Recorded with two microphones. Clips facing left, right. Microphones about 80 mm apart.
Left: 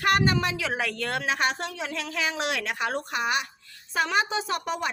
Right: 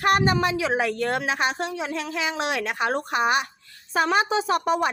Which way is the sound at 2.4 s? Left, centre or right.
Right.